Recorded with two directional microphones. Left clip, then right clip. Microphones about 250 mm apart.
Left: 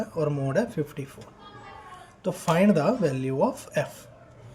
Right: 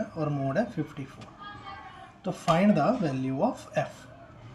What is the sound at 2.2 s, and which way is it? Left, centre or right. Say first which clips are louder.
Speech: left 2 dB; left.